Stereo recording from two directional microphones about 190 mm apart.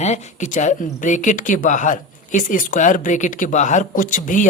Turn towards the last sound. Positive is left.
turn(degrees=45)  # may be behind; listen again after turning